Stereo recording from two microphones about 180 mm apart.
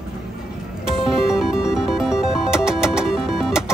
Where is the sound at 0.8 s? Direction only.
5° right (ahead or behind).